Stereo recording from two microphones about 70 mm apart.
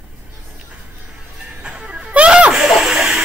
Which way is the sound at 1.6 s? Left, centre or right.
Centre.